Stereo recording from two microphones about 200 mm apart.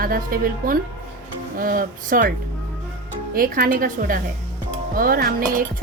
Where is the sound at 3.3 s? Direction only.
45° right (ahead or behind).